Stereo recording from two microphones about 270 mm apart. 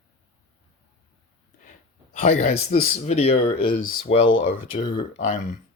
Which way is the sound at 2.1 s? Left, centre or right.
Left.